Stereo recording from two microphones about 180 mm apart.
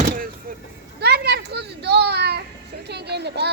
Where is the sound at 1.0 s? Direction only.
65° right (ahead or behind).